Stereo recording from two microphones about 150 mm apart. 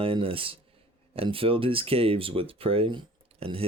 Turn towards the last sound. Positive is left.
turn(degrees=-40)  # may be behind; listen again after turning